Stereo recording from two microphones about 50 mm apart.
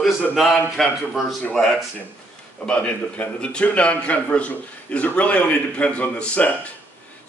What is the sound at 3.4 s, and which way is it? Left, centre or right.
A man's voice, left.